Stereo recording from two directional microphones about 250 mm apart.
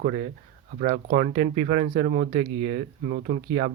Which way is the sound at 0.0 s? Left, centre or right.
Right.